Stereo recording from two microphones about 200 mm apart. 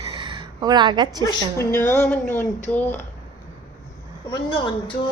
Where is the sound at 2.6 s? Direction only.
10° left (ahead or behind).